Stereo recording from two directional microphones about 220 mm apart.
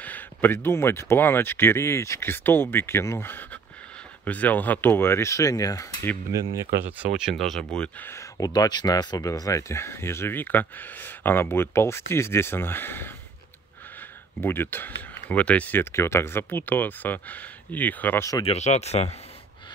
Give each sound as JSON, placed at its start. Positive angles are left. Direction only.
{"t": 0.0, "sound": "speech", "side_deg": 10}
{"t": 7.2, "sound": "speech", "side_deg": 0}
{"t": 14.4, "sound": "speech", "side_deg": 10}
{"t": 18.4, "sound": "speech", "side_deg": 30}